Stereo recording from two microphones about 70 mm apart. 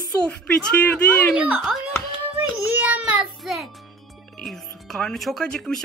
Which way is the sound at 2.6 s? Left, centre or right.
Right.